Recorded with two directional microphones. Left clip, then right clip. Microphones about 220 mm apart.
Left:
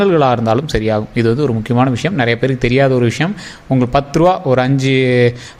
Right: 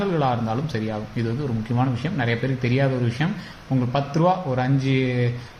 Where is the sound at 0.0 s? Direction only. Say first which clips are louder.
Left 11 dB; 45° left (ahead or behind).